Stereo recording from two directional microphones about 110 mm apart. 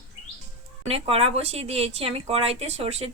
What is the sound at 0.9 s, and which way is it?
Speech, 65° right (ahead or behind).